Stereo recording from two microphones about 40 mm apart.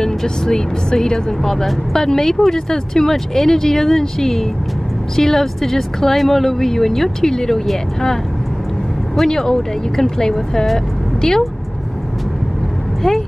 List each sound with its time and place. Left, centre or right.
0.0 s speech: centre
9.3 s speech: centre